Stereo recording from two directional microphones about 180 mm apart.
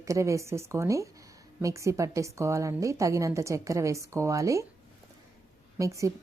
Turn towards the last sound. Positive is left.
turn(degrees=-15)  # may be behind; listen again after turning